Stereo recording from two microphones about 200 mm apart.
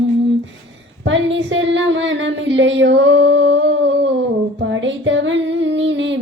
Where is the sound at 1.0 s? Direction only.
65° right (ahead or behind).